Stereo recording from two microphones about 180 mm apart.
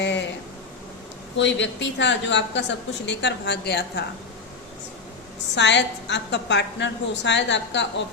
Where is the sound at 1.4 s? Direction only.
85° left; by 4.0 s 65° left (ahead or behind).